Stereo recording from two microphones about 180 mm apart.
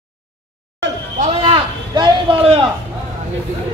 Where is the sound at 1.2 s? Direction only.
30° right (ahead or behind).